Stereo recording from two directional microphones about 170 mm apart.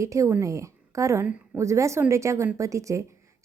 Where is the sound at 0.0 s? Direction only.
20° right (ahead or behind).